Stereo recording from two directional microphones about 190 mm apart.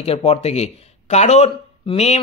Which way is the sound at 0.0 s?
30° left (ahead or behind).